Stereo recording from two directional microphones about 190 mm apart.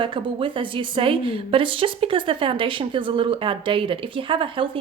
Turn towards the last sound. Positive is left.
turn(degrees=-25)  # may be behind; listen again after turning